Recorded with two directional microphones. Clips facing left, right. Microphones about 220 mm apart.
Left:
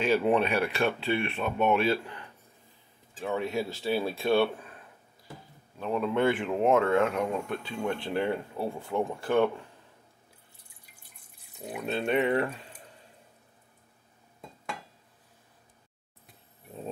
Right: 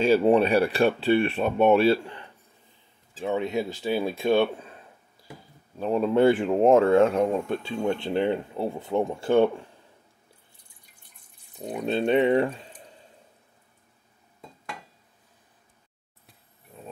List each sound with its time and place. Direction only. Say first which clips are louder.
0.0 s speech: right 5 dB; 35° right (ahead or behind)
3.2 s speech: right 4 dB; 20° right (ahead or behind)
5.8 s speech: right 6 dB; 35° right (ahead or behind)
11.6 s speech: right 6 dB; 35° right (ahead or behind)